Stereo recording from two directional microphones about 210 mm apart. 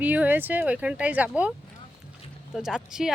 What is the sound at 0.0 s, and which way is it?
Speech, 10° right (ahead or behind).